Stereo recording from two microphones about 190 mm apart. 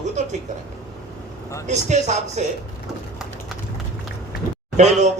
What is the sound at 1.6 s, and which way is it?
Speech, 35° right (ahead or behind).